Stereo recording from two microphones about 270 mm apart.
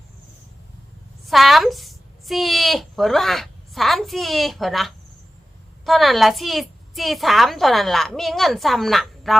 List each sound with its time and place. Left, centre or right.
1.3 s a woman's voice: centre